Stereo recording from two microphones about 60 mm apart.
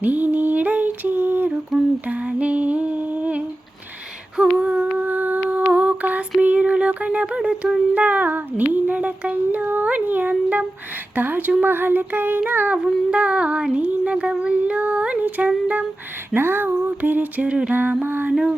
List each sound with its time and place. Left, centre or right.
0.0 s female singing: right
1.7 s a sound: centre
2.0 s humming: right
7.9 s child singing: right
11.1 s speech: right
11.6 s child singing: right
13.1 s a sound: right
16.3 s a sound: right
17.7 s music: right